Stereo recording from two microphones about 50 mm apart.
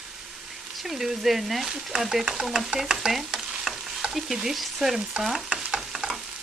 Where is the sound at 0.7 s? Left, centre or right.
Centre.